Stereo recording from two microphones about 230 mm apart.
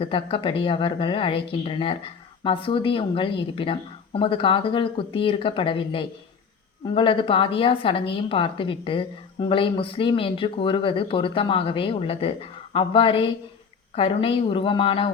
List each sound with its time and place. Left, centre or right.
0.0 s speech: left